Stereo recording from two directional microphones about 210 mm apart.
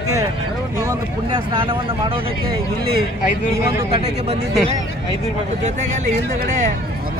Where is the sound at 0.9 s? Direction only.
20° right (ahead or behind).